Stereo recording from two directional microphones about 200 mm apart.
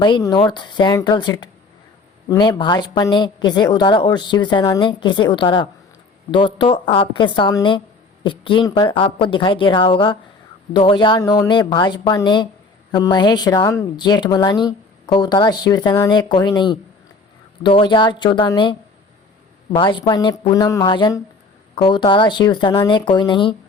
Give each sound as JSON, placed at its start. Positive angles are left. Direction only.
{"t": 0.0, "sound": "a woman's voice", "side_deg": 20}